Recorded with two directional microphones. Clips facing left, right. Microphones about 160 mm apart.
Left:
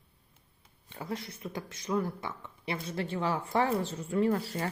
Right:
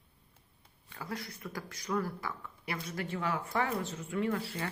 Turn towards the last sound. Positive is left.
turn(degrees=40)  # may be behind; listen again after turning